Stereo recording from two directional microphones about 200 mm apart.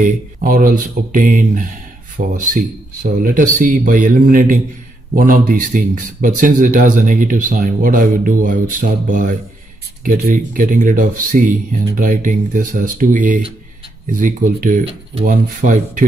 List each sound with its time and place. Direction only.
0.0 s speech: 45° right (ahead or behind)